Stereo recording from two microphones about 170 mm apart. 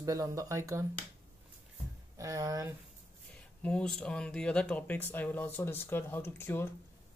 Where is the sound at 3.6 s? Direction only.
5° left (ahead or behind).